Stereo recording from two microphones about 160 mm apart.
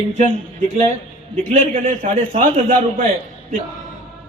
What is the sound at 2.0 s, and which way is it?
A man's voice, 55° right (ahead or behind).